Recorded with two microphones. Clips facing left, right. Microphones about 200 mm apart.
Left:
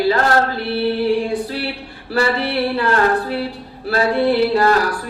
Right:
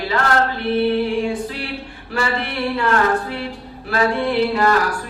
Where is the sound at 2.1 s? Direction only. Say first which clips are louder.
Left 5 dB; 35° left (ahead or behind).